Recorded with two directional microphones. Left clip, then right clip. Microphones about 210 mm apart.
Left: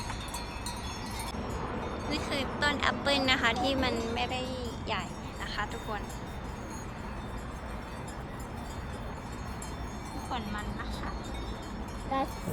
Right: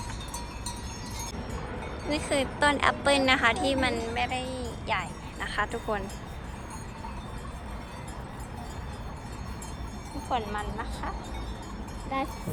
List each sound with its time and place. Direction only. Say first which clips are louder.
2.0 s a woman's voice: right 7 dB; 5° left (ahead or behind)
5.4 s a woman's voice: right 6 dB; centre (ahead or behind)
10.3 s a woman's voice: right 8 dB; centre (ahead or behind)